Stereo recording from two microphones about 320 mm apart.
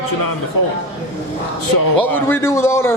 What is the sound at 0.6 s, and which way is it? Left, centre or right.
Speech, left.